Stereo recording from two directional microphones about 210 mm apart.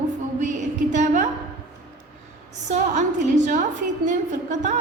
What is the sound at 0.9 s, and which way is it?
Speech, 40° right (ahead or behind).